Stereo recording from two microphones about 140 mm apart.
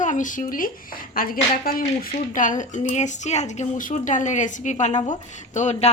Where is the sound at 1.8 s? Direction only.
65° left (ahead or behind).